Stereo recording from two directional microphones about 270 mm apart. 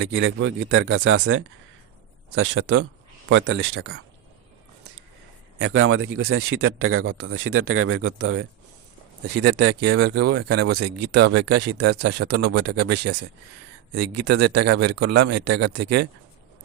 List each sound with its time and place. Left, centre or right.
0.0 s speech: right
5.5 s speech: right
10.8 s speech: right
11.1 s speech: right
13.9 s speech: right
14.4 s speech: right